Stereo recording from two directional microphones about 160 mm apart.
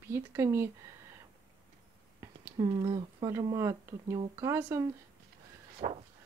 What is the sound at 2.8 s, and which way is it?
A woman's voice, 20° right (ahead or behind).